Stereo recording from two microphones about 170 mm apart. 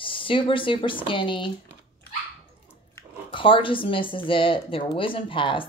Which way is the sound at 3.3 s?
30° left (ahead or behind).